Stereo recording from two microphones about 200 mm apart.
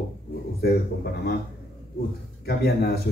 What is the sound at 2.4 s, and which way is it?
Speech, 50° left (ahead or behind).